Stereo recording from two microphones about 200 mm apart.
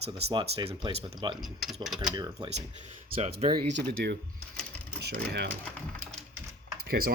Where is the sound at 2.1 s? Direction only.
20° right (ahead or behind).